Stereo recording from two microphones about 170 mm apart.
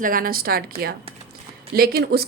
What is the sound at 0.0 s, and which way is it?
A woman's voice, 55° right (ahead or behind).